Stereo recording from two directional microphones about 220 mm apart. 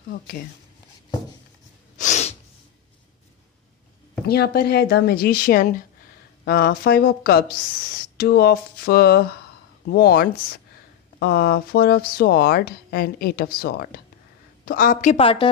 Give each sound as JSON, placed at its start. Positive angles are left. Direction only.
{"t": 0.1, "sound": "speech", "side_deg": 45}
{"t": 2.0, "sound": "sneeze", "side_deg": 30}
{"t": 4.3, "sound": "a woman's voice", "side_deg": 45}